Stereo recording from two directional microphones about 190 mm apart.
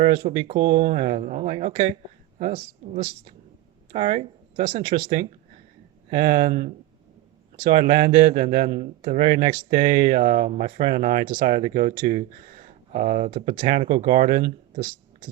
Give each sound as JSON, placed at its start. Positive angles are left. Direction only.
{"t": 0.3, "sound": "a man's voice", "side_deg": -30}
{"t": 0.6, "sound": "a man's voice", "side_deg": -45}
{"t": 7.8, "sound": "a man's voice", "side_deg": -50}
{"t": 9.6, "sound": "a man's voice", "side_deg": -45}
{"t": 14.3, "sound": "speech", "side_deg": -50}
{"t": 14.8, "sound": "speech", "side_deg": -30}